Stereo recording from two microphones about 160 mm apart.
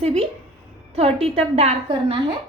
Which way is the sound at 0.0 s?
40° right (ahead or behind).